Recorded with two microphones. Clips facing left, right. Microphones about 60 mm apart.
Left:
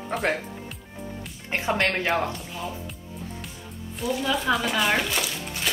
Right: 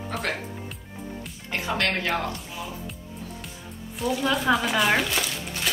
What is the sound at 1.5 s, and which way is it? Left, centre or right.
Speech, left.